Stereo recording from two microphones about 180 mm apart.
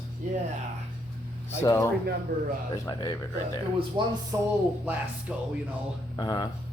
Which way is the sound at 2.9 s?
20° left (ahead or behind).